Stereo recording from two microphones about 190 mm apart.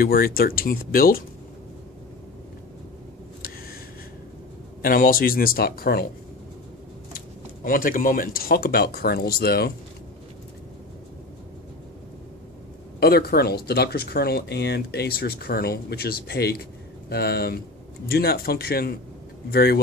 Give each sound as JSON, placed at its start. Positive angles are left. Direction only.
{"t": 0.0, "sound": "speech", "side_deg": 50}
{"t": 4.8, "sound": "speech", "side_deg": 50}
{"t": 7.1, "sound": "speech", "side_deg": 50}
{"t": 13.0, "sound": "speech", "side_deg": 55}